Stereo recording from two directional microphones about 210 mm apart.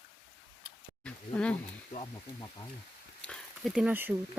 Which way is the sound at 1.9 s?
25° left (ahead or behind).